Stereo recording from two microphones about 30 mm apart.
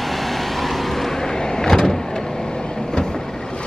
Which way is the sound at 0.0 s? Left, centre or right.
Centre.